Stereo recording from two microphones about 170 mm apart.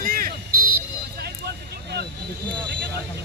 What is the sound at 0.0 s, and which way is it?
Vehicle, 55° right (ahead or behind).